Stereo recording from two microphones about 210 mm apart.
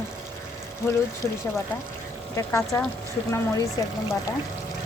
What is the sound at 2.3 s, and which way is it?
Speech, 15° left (ahead or behind).